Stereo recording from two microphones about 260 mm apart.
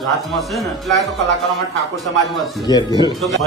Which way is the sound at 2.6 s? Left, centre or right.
Centre.